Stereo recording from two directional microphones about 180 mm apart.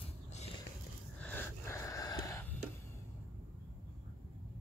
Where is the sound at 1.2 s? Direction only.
10° left (ahead or behind).